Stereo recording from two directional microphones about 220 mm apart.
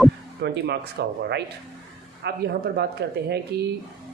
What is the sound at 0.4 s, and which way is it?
Speech, 50° right (ahead or behind).